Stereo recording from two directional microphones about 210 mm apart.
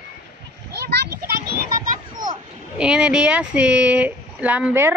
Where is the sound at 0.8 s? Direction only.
50° right (ahead or behind).